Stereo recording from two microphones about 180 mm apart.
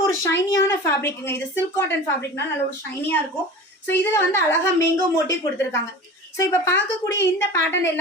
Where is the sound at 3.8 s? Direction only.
15° left (ahead or behind).